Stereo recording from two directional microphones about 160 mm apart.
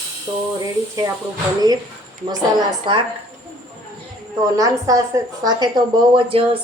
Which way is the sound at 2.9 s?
30° right (ahead or behind).